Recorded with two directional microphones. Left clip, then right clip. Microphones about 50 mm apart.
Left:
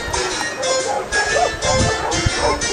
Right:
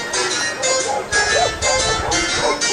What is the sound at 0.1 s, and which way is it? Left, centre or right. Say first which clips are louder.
Music: right 2 dB; right.